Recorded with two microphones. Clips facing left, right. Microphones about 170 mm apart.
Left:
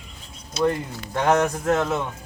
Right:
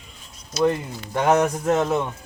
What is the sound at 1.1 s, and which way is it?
Speech, 10° right (ahead or behind).